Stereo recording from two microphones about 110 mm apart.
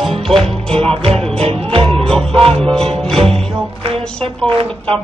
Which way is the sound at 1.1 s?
60° right (ahead or behind).